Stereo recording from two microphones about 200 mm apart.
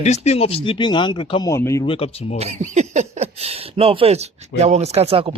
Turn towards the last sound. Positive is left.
turn(degrees=-30)  # may be behind; listen again after turning